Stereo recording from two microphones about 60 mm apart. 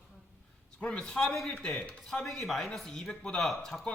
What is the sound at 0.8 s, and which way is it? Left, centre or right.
A man's voice, centre.